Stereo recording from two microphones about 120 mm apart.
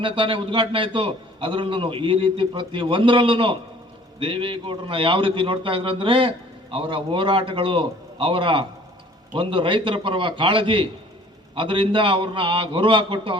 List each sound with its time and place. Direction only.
0.0 s a man's voice: 45° right (ahead or behind)